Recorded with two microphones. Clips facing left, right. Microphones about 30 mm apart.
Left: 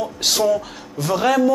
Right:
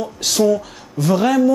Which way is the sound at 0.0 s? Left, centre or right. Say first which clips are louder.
Right 2 dB; centre.